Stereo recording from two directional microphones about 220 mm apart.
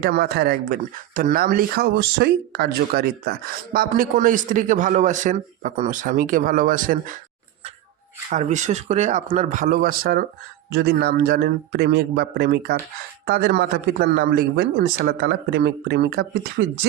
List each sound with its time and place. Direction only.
0.0 s speech: 45° right (ahead or behind)
8.3 s speech: 35° right (ahead or behind)